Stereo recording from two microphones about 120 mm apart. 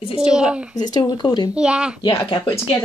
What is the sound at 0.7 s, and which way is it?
Speech, 35° left (ahead or behind).